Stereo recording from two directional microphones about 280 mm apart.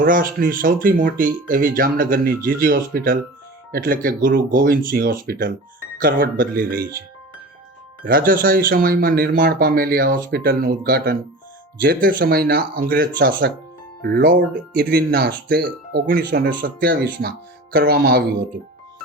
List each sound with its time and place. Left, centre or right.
0.0 s speech: right
8.0 s speech: right